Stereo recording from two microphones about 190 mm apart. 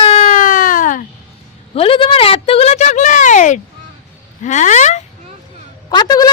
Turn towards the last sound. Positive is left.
turn(degrees=20)  # may be behind; listen again after turning